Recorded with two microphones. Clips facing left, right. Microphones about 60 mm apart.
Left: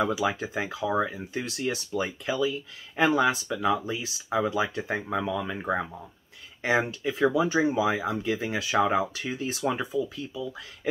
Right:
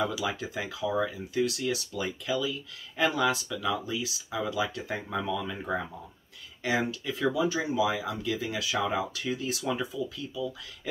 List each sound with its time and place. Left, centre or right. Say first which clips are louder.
0.0 s speech: left 4 dB; left